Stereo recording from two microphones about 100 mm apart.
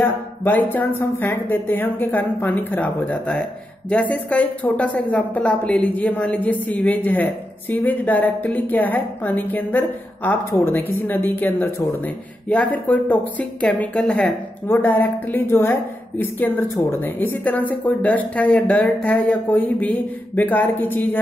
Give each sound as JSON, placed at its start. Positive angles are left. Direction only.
{"t": 0.0, "sound": "speech", "side_deg": 20}
{"t": 14.7, "sound": "speech", "side_deg": 20}